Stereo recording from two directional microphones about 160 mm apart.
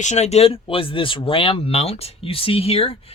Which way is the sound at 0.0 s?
45° left (ahead or behind).